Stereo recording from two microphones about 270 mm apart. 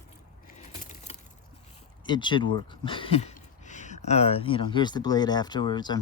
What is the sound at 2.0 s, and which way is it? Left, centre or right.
Speech, centre.